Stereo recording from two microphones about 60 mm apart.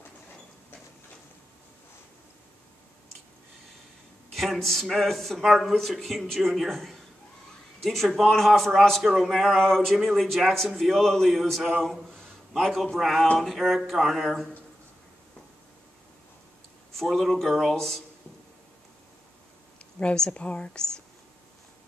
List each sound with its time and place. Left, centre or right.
4.3 s a man's voice: centre
16.9 s a man's voice: centre
20.0 s speech: centre